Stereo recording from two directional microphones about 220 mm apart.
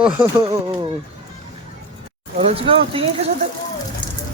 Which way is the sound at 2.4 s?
25° right (ahead or behind).